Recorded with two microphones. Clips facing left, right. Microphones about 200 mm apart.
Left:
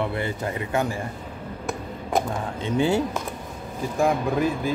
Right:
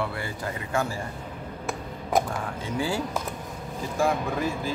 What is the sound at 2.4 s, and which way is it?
Speech, 25° left (ahead or behind).